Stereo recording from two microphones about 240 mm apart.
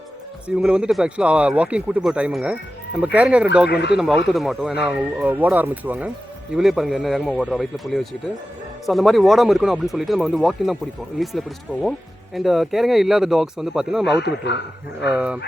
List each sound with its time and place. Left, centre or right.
0.4 s speech: centre
3.7 s speech: left
3.9 s speech: centre
14.0 s speech: left
15.1 s speech: centre